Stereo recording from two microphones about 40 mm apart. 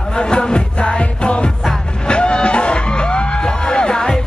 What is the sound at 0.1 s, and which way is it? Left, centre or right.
Music, left.